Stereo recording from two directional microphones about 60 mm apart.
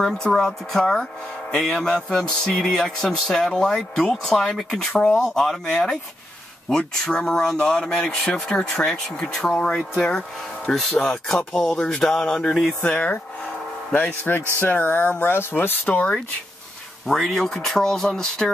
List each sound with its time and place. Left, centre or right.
0.0 s speech: centre
12.8 s cattle: left
14.6 s speech: left
17.2 s speech: centre